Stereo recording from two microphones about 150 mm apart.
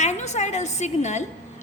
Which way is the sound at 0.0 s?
50° left (ahead or behind).